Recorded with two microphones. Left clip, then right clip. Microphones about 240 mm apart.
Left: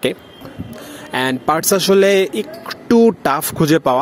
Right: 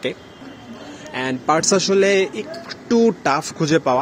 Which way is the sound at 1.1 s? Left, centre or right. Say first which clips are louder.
Left 2 dB; left.